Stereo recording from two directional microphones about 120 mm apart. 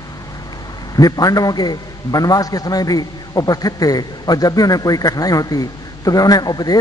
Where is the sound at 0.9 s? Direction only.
30° left (ahead or behind).